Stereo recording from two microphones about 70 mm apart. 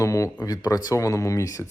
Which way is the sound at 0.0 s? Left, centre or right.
Left.